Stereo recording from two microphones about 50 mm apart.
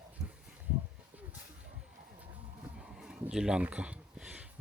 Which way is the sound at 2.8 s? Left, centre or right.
Centre.